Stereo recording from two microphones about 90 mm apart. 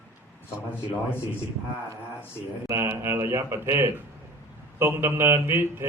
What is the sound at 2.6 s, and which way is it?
A man's voice, 30° right (ahead or behind).